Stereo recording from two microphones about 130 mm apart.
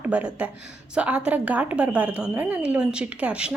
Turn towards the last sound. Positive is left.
turn(degrees=-10)  # may be behind; listen again after turning